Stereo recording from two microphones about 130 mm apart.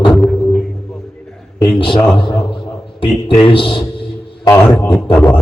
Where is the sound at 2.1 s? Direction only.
40° left (ahead or behind).